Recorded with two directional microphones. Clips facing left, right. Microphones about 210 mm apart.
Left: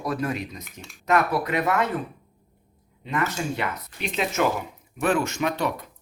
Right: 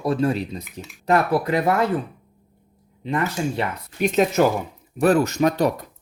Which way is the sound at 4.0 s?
45° right (ahead or behind).